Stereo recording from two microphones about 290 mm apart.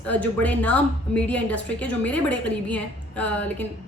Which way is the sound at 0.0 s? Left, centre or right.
Centre.